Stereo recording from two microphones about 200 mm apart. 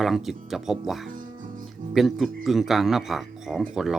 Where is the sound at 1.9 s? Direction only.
Centre (ahead or behind).